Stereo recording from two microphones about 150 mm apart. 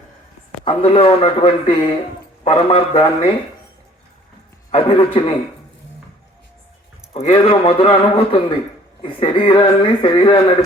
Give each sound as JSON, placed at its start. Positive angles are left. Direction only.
{"t": 0.6, "sound": "a man's voice", "side_deg": 35}
{"t": 4.7, "sound": "a man's voice", "side_deg": 40}
{"t": 7.1, "sound": "a man's voice", "side_deg": 40}